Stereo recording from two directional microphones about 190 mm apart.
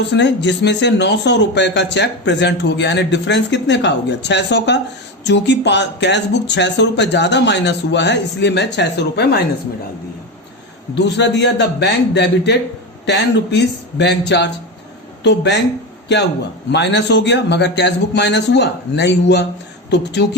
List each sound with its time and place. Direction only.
0.1 s speech: 65° left (ahead or behind)
10.9 s speech: 65° left (ahead or behind)
16.7 s speech: 65° left (ahead or behind)